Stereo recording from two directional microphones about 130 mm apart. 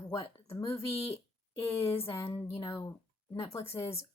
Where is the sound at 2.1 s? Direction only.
20° left (ahead or behind).